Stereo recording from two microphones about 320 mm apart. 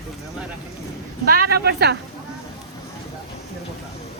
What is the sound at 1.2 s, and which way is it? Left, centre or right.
Speech, right.